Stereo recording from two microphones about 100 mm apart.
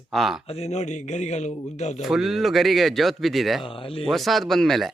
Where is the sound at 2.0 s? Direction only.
Centre (ahead or behind).